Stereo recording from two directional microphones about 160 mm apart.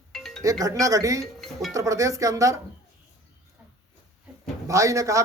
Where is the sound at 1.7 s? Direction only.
20° right (ahead or behind).